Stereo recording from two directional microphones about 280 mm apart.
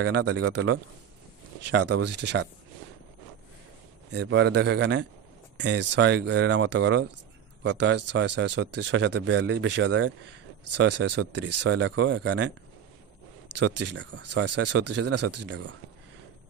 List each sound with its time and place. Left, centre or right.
0.0 s speech: right
1.7 s speech: right
4.1 s speech: right
13.7 s speech: right